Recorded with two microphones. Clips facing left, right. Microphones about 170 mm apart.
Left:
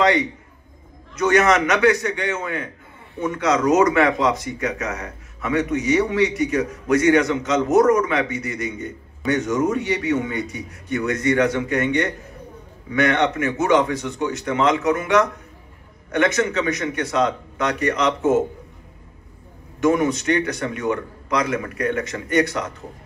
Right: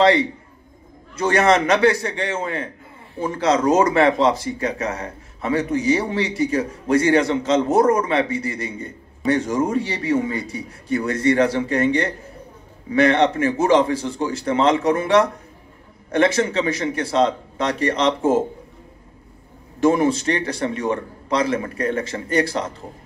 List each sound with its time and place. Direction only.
0.0 s a man's voice: 30° right (ahead or behind)
19.8 s speech: 30° right (ahead or behind)